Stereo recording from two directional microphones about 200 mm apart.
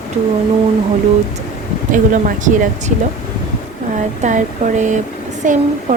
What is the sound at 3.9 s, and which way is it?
Speech, 40° right (ahead or behind).